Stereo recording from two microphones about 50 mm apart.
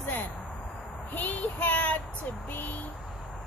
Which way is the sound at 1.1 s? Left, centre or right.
Left.